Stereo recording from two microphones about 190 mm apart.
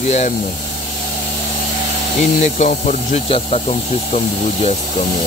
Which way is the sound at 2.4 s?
40° left (ahead or behind).